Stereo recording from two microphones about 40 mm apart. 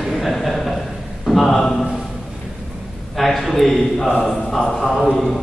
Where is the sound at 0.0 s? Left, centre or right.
Centre.